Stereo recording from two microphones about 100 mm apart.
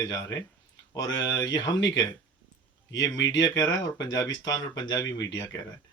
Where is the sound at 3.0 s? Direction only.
40° left (ahead or behind).